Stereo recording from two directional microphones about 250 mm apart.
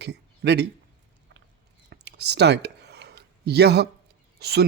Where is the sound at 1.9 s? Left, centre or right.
Right.